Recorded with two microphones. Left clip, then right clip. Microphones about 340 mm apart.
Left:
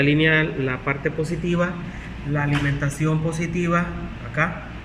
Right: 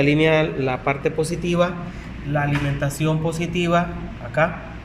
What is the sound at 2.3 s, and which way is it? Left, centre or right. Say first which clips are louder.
Speech: right 1 dB; centre.